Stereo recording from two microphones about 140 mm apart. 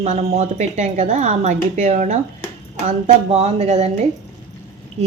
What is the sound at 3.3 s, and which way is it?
Speech, 50° right (ahead or behind).